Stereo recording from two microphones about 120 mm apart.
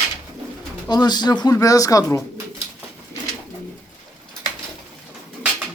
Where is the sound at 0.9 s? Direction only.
35° left (ahead or behind).